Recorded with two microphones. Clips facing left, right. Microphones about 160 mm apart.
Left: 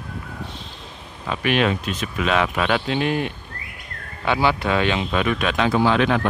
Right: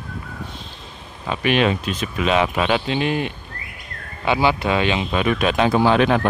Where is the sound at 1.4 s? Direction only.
Centre (ahead or behind).